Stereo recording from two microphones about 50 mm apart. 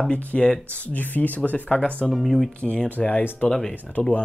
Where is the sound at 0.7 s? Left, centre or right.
Left.